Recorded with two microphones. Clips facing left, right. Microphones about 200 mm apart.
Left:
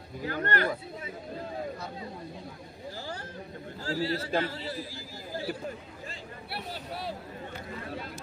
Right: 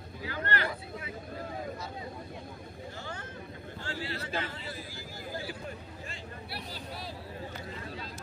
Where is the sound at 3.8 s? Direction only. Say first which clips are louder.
Left 8 dB; 35° left (ahead or behind).